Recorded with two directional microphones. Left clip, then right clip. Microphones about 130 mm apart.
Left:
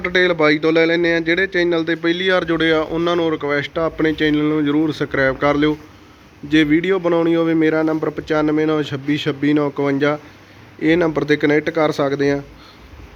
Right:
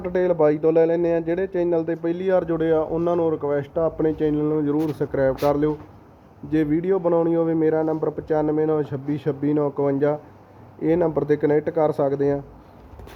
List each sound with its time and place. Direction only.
0.0 s a man's voice: 5° left (ahead or behind)
5.3 s speech: 20° left (ahead or behind)
6.5 s a man's voice: 5° left (ahead or behind)